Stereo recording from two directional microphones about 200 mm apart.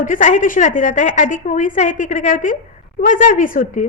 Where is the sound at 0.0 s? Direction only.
40° left (ahead or behind).